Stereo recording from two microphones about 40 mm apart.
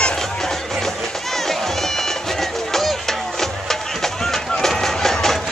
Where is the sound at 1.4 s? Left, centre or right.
Centre.